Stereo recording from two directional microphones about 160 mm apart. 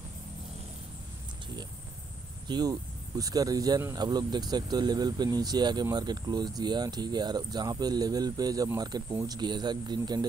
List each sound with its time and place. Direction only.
2.4 s speech: 25° right (ahead or behind)